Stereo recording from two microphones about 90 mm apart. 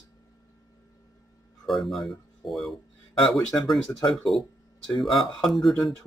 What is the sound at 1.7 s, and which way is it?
Speech, centre (ahead or behind).